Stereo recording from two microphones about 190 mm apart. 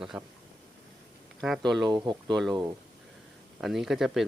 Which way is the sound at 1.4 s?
Centre (ahead or behind).